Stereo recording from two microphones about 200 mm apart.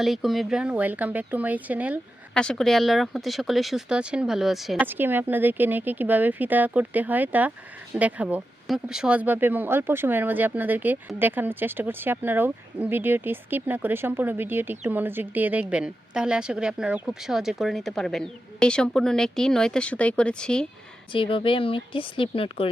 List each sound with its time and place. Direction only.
0.0 s speech: centre (ahead or behind)
2.3 s speech: 5° left (ahead or behind)
21.1 s speech: 25° left (ahead or behind)